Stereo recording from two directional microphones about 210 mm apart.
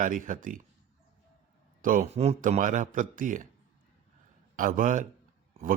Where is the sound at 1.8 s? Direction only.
40° right (ahead or behind).